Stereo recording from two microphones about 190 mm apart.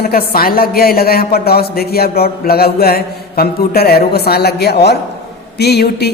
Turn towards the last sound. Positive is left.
turn(degrees=60)  # may be behind; listen again after turning